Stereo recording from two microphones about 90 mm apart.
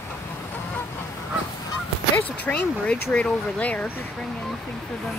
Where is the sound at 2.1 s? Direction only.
20° left (ahead or behind).